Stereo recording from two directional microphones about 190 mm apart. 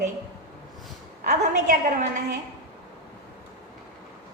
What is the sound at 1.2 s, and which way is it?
A woman's voice, 40° right (ahead or behind).